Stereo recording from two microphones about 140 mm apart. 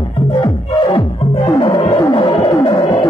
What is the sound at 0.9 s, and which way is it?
Music, 40° left (ahead or behind).